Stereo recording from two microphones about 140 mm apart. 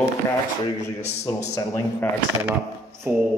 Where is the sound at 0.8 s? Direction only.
20° left (ahead or behind).